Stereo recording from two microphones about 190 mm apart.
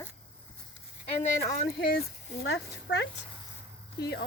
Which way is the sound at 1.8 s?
55° left (ahead or behind).